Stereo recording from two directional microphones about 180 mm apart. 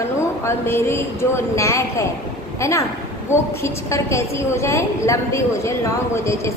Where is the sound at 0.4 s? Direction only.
15° left (ahead or behind).